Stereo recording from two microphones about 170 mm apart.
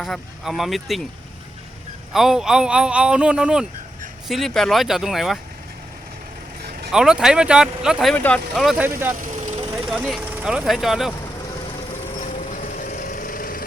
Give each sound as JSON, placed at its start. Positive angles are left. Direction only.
{"t": 0.0, "sound": "speech", "side_deg": 0}
{"t": 2.1, "sound": "speech", "side_deg": -5}
{"t": 6.9, "sound": "speech", "side_deg": -5}
{"t": 8.1, "sound": "speech", "side_deg": 10}
{"t": 9.2, "sound": "vehicle", "side_deg": -45}
{"t": 9.9, "sound": "speech", "side_deg": -5}
{"t": 12.1, "sound": "vehicle", "side_deg": 45}